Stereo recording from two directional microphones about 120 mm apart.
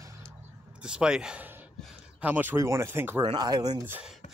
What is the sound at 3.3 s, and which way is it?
Speech, 35° right (ahead or behind).